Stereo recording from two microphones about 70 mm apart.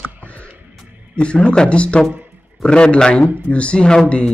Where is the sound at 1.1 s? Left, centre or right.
Centre.